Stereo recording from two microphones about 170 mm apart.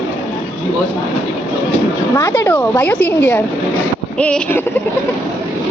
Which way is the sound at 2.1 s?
10° left (ahead or behind).